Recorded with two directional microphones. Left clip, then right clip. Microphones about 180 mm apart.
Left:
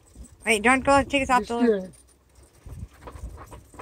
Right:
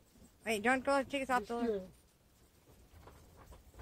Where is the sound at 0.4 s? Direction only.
35° right (ahead or behind).